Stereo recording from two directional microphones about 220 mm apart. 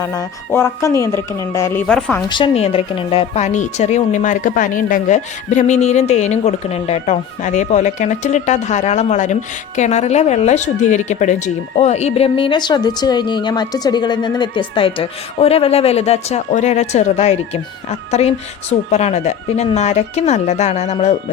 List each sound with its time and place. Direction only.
0.0 s speech: 15° left (ahead or behind)
2.3 s a woman's voice: 25° left (ahead or behind)